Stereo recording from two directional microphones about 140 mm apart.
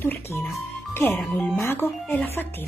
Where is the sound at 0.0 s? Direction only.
15° left (ahead or behind).